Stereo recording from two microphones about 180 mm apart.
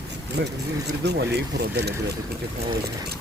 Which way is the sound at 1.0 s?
70° right (ahead or behind).